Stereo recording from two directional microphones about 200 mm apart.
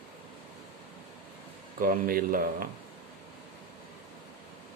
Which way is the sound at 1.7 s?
45° right (ahead or behind).